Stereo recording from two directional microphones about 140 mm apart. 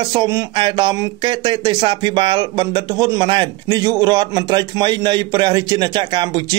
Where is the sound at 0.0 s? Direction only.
30° right (ahead or behind).